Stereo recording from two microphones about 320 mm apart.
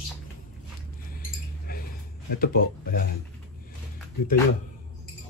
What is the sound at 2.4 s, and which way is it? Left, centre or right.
Speech, left.